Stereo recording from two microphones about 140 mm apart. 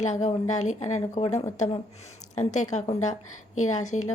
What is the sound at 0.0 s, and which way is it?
A woman's voice, 60° left (ahead or behind).